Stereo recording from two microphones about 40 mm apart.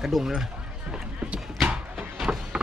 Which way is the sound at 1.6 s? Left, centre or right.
Right.